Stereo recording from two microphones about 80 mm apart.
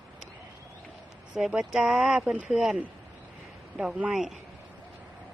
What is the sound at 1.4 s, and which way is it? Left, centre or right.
Speech, centre.